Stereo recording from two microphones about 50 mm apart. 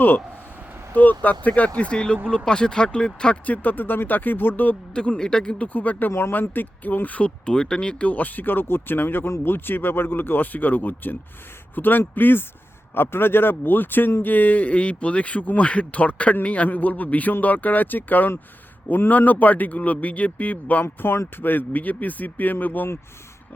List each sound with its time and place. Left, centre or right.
0.9 s speech: left; by 3.3 s centre
3.4 s a man's voice: left
4.9 s speech: centre
5.5 s a man's voice: left
6.1 s speech: left
6.5 s a man's voice: left
7.3 s a man's voice: centre; by 20.8 s left
20.8 s speech: left
21.3 s a man's voice: left